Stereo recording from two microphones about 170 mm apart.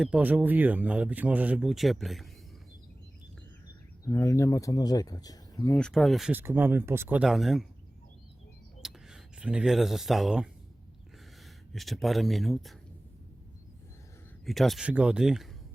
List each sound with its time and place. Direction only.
0.0 s speech: 5° right (ahead or behind)
4.0 s speech: 20° left (ahead or behind)
5.7 s speech: 5° left (ahead or behind)
8.8 s speech: 5° right (ahead or behind)
11.7 s speech: centre (ahead or behind)
14.4 s speech: centre (ahead or behind)